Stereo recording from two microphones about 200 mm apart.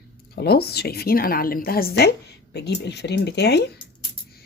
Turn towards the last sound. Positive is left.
turn(degrees=55)  # may be behind; listen again after turning